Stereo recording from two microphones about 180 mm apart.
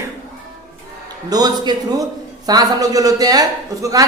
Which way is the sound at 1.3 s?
20° right (ahead or behind).